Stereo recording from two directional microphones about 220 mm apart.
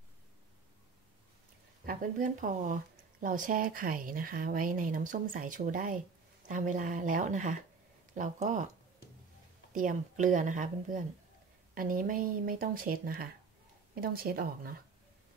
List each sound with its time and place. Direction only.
1.9 s speech: 35° right (ahead or behind)
9.7 s speech: 35° right (ahead or behind)